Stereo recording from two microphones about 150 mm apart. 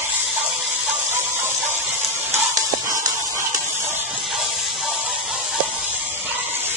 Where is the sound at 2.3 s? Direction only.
20° right (ahead or behind).